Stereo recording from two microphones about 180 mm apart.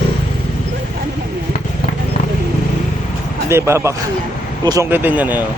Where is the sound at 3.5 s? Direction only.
15° right (ahead or behind).